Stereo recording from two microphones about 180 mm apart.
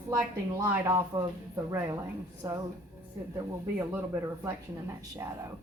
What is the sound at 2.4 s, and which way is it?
Speech, 15° right (ahead or behind).